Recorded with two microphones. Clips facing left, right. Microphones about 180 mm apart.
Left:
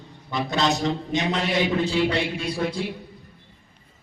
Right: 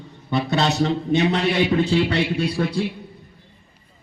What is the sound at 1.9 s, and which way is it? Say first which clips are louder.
Speech: right 3 dB; 65° right (ahead or behind).